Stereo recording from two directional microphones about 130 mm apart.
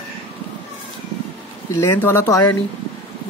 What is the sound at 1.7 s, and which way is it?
Speech, 20° left (ahead or behind).